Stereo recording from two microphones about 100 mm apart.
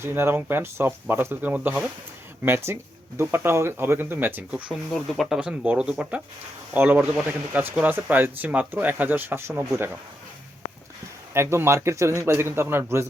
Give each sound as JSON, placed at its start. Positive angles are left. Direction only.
{"t": 0.0, "sound": "speech", "side_deg": -25}
{"t": 2.4, "sound": "speech", "side_deg": -25}
{"t": 4.9, "sound": "speech", "side_deg": 0}
{"t": 5.4, "sound": "speech", "side_deg": -10}
{"t": 11.3, "sound": "speech", "side_deg": -25}